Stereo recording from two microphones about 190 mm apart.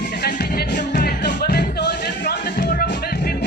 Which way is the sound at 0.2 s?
60° left (ahead or behind).